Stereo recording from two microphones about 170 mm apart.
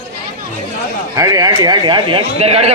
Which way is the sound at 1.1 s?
20° right (ahead or behind).